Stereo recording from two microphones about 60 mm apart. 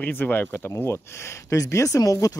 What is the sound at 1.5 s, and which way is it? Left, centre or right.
Speech, left.